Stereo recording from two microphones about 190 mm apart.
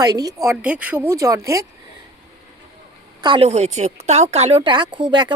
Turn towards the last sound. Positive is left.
turn(degrees=-20)  # may be behind; listen again after turning